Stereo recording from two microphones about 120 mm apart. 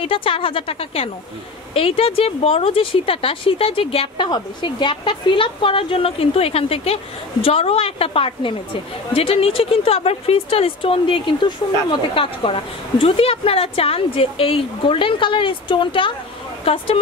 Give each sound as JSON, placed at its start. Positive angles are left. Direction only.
{"t": 0.0, "sound": "speech", "side_deg": 50}
{"t": 4.3, "sound": "speech", "side_deg": 40}